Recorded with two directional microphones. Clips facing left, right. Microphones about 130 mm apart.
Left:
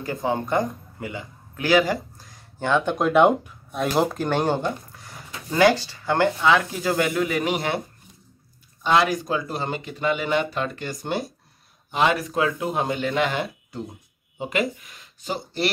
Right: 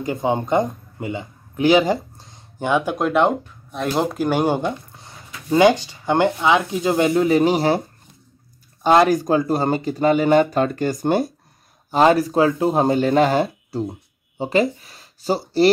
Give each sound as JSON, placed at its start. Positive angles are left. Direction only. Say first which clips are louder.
{"t": 0.0, "sound": "speech", "louder": "right 4 dB", "side_deg": -20}
{"t": 2.6, "sound": "speech", "louder": "right 2 dB", "side_deg": -15}
{"t": 2.9, "sound": "speech", "louder": "left 3 dB", "side_deg": 0}
{"t": 4.6, "sound": "a sound", "louder": "right 3 dB", "side_deg": -25}
{"t": 5.5, "sound": "speech", "louder": "right 4 dB", "side_deg": -20}
{"t": 8.8, "sound": "speech", "louder": "right 6 dB", "side_deg": -45}
{"t": 11.9, "sound": "speech", "louder": "right 7 dB", "side_deg": -35}